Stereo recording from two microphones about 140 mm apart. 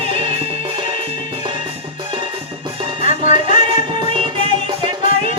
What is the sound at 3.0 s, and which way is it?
Music, 60° left (ahead or behind).